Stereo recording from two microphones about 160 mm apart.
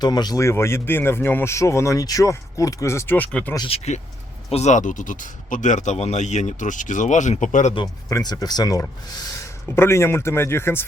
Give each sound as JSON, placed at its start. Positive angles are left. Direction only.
{"t": 0.0, "sound": "speech", "side_deg": 25}
{"t": 3.7, "sound": "speech", "side_deg": 45}
{"t": 7.8, "sound": "speech", "side_deg": 25}